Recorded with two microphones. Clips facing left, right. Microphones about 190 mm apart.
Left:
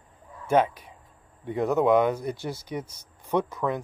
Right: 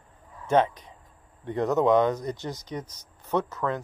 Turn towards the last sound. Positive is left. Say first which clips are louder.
# left 1 dB
turn(degrees=15)  # may be behind; listen again after turning